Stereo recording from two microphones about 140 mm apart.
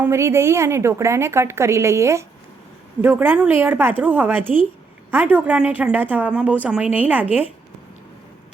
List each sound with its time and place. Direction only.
0.0 s a woman's voice: 20° right (ahead or behind)